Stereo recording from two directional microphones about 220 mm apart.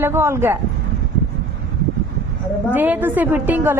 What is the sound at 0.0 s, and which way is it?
Speech, 10° right (ahead or behind).